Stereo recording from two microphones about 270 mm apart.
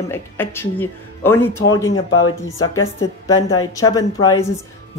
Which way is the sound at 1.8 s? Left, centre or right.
Left.